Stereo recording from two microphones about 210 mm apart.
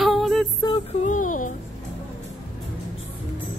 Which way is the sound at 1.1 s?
40° left (ahead or behind).